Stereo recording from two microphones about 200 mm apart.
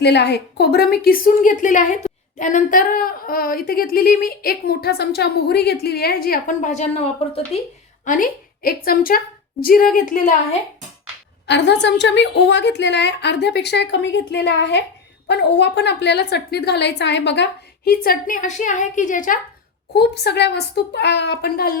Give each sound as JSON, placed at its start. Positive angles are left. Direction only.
{"t": 0.0, "sound": "a woman's voice", "side_deg": 55}
{"t": 8.0, "sound": "a woman's voice", "side_deg": 40}
{"t": 11.4, "sound": "a woman's voice", "side_deg": 60}
{"t": 19.9, "sound": "a woman's voice", "side_deg": 55}